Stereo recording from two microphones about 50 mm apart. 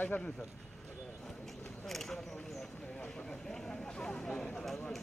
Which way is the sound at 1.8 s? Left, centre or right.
Centre.